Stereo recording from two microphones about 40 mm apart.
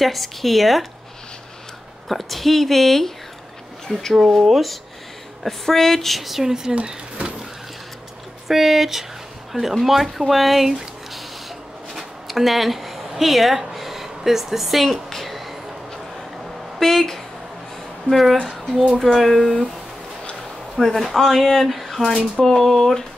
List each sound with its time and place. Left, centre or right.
0.0 s speech: centre
2.0 s speech: centre
6.7 s a sound: right
8.5 s speech: centre
11.9 s a sound: centre
16.8 s speech: centre
20.8 s speech: centre